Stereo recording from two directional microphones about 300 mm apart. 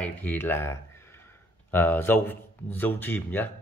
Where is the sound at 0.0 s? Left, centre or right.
Centre.